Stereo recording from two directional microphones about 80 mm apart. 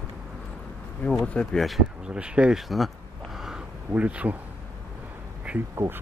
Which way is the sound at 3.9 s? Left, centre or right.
Centre.